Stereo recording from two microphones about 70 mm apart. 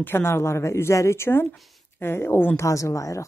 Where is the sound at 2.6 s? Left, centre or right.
Left.